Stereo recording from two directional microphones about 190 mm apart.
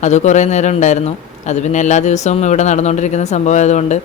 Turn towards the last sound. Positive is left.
turn(degrees=35)  # may be behind; listen again after turning